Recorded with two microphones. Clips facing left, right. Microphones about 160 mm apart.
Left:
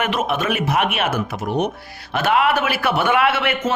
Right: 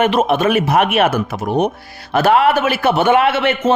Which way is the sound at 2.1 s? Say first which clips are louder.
Right 5 dB; 35° right (ahead or behind).